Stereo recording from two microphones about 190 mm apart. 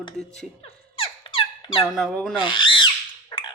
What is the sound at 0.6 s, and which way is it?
Squeak, 30° left (ahead or behind).